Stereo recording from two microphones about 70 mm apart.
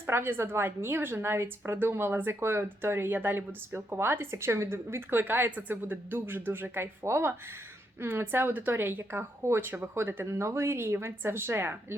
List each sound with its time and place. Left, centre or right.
0.1 s a woman's voice: right